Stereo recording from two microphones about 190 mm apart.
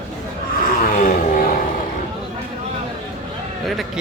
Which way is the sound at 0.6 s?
45° left (ahead or behind).